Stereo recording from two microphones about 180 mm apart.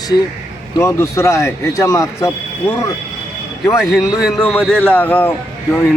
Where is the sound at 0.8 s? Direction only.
15° left (ahead or behind).